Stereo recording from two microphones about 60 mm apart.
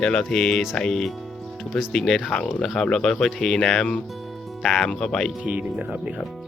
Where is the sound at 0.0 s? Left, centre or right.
Centre.